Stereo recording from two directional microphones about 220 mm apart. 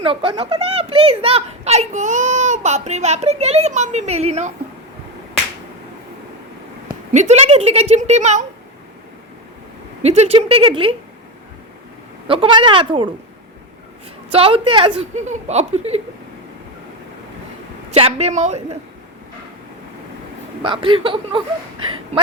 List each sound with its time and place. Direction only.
0.0 s a child's voice: 25° right (ahead or behind)
7.1 s a woman's voice: 30° right (ahead or behind)
10.0 s a child's voice: 30° right (ahead or behind)
12.3 s a child's voice: 25° right (ahead or behind)
14.3 s a child's voice: 25° right (ahead or behind)
17.9 s a child's voice: 25° right (ahead or behind)
20.6 s a child's voice: 20° right (ahead or behind)